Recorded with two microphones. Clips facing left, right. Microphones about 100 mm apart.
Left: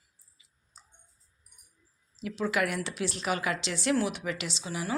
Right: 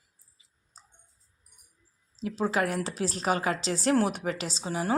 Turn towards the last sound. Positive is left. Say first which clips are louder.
# right 5 dB
turn(degrees=-40)  # may be behind; listen again after turning